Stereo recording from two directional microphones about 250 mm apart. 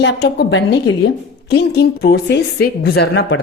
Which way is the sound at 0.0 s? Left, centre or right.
Left.